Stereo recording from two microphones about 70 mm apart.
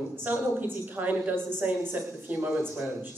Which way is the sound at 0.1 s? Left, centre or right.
Right.